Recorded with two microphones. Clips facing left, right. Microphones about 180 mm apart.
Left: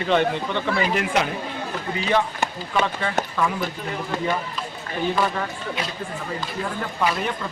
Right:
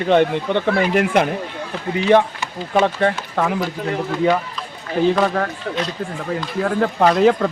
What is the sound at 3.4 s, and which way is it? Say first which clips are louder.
Speech: right 4 dB; 70° right (ahead or behind).